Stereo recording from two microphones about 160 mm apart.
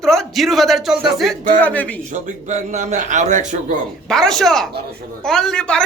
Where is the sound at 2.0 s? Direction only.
50° right (ahead or behind).